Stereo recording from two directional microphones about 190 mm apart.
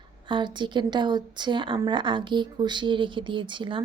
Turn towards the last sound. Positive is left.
turn(degrees=-25)  # may be behind; listen again after turning